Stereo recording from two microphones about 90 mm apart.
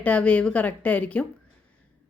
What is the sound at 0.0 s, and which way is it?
Speech, 15° left (ahead or behind).